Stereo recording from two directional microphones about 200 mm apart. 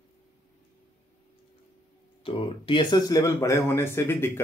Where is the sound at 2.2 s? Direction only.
25° left (ahead or behind).